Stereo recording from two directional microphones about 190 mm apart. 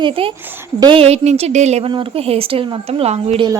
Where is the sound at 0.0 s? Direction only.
30° right (ahead or behind).